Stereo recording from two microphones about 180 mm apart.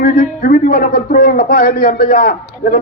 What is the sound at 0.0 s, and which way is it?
A man's voice, 50° left (ahead or behind).